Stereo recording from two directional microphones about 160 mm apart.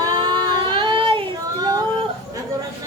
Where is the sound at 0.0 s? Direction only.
30° right (ahead or behind).